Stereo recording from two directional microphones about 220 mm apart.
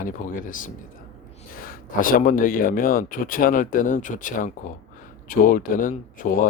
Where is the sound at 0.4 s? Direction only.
35° left (ahead or behind).